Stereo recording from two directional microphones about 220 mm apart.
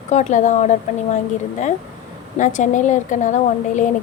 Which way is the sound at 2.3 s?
35° left (ahead or behind).